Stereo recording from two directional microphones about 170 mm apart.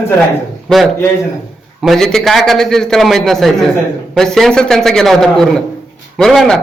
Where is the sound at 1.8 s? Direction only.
5° left (ahead or behind).